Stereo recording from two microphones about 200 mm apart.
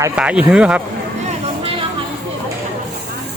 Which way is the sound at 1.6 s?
30° right (ahead or behind).